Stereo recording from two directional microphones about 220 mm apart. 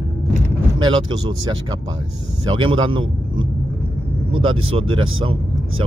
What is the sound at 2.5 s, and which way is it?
Speech, 25° right (ahead or behind).